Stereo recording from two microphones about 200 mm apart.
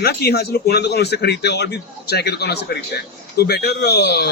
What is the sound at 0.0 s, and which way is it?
A man's voice, 55° left (ahead or behind).